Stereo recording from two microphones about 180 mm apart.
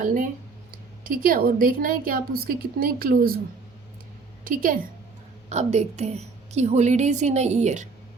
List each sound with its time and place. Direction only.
0.0 s a sound: 50° right (ahead or behind)
0.7 s a woman's voice: 50° right (ahead or behind)
4.4 s a woman's voice: 50° right (ahead or behind)
5.5 s a woman's voice: 40° right (ahead or behind)